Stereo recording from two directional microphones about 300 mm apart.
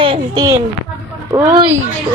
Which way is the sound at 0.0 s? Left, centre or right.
Centre.